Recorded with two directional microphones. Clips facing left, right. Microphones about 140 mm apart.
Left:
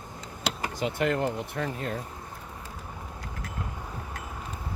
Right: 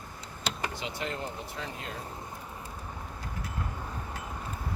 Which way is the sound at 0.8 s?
55° left (ahead or behind).